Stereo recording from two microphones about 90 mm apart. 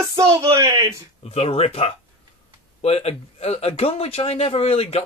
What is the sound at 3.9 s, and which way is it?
Speech, 90° left.